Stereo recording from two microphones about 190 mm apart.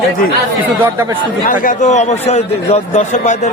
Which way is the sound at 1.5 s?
45° left (ahead or behind).